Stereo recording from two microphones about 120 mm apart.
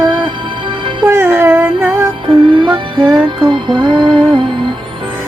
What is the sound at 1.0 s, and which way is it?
Music, 20° right (ahead or behind).